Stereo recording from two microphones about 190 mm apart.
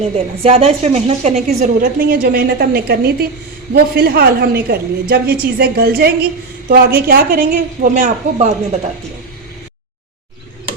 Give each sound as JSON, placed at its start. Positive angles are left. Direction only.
{"t": 0.4, "sound": "a woman's voice", "side_deg": -30}